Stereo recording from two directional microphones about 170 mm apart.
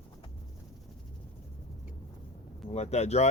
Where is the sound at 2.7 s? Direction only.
40° left (ahead or behind).